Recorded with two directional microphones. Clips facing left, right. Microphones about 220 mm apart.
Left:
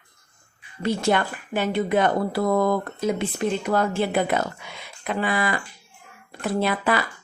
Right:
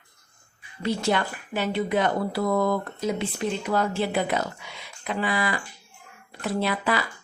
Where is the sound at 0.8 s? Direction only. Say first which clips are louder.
Left 3 dB; 50° left (ahead or behind).